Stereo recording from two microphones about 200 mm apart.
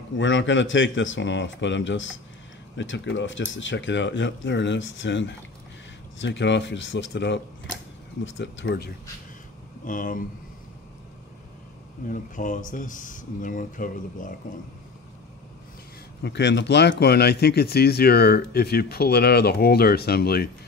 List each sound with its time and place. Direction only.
0.2 s speech: 65° left (ahead or behind)
9.8 s speech: 45° left (ahead or behind)
12.1 s speech: 40° left (ahead or behind)
16.2 s speech: 60° left (ahead or behind)